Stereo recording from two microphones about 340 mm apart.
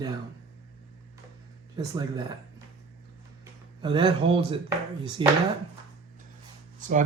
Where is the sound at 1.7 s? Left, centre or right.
Centre.